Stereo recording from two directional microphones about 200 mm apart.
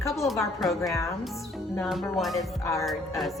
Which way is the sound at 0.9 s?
15° left (ahead or behind).